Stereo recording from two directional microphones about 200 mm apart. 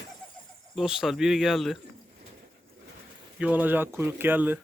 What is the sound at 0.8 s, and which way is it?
Speech, centre (ahead or behind).